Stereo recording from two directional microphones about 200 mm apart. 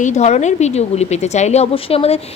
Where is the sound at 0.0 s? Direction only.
35° left (ahead or behind).